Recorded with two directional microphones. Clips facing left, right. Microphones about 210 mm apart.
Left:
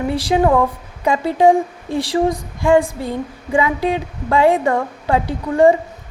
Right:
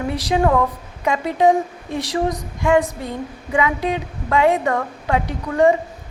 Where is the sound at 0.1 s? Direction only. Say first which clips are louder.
Left 3 dB; 30° left (ahead or behind).